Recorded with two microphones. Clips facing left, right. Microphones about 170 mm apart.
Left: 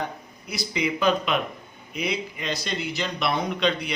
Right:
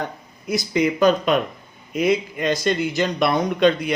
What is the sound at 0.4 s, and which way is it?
Speech, 50° right (ahead or behind).